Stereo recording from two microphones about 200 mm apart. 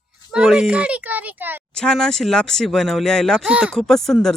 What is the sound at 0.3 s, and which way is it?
A child's voice, centre (ahead or behind).